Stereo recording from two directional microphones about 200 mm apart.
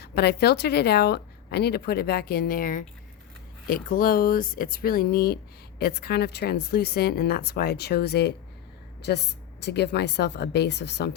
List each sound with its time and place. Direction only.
0.0 s a woman's voice: 55° left (ahead or behind)